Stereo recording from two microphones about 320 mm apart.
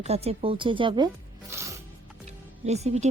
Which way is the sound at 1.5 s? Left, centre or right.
Centre.